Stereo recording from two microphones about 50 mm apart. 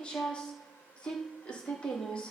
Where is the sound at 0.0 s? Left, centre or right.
Centre.